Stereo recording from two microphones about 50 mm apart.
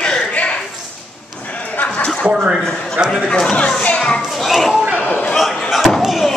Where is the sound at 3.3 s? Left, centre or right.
Centre.